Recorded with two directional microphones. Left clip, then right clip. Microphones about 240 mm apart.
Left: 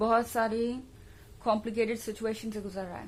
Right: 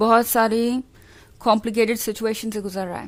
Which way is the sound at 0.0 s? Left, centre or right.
Right.